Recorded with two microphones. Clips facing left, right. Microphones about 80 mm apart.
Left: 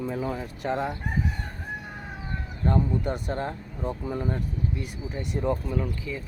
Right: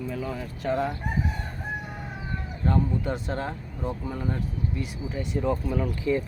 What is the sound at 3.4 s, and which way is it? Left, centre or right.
Speech, centre.